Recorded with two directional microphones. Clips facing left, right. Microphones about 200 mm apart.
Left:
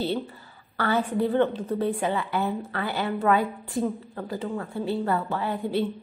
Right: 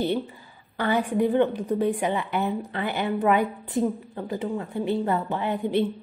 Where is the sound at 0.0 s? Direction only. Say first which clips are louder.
Right 2 dB; 15° right (ahead or behind).